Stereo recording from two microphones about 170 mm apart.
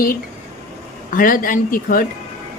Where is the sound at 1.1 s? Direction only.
55° left (ahead or behind).